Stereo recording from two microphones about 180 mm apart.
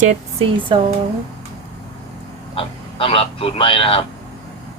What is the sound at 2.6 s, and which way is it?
Speech, 30° left (ahead or behind).